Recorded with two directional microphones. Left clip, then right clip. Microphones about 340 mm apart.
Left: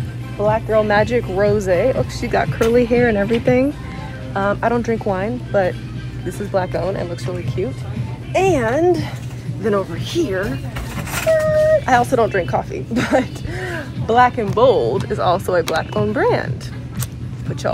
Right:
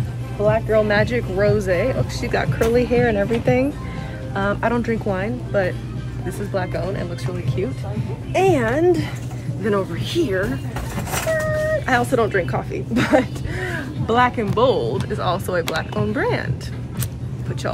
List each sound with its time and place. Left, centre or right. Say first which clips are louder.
0.4 s speech: left 1 dB; centre
4.3 s speech: left 3 dB; centre